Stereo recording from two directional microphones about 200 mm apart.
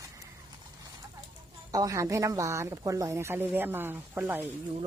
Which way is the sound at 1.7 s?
15° right (ahead or behind).